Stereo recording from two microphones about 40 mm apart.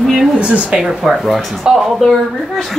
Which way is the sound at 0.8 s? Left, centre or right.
Centre.